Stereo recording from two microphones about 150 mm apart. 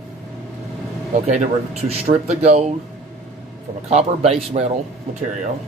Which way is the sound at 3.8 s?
45° right (ahead or behind).